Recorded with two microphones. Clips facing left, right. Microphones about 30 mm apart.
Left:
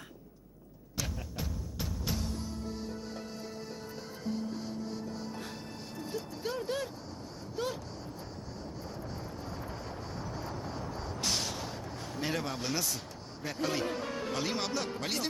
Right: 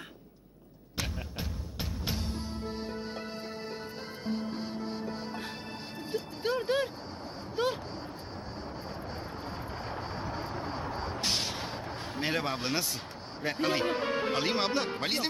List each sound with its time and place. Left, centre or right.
0.9 s music: right
6.0 s vehicle: right
7.5 s a sound: right
9.9 s vehicle: right
13.4 s a man's voice: right